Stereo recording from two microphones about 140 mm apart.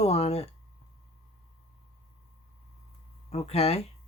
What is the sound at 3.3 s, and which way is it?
Speech, 50° left (ahead or behind).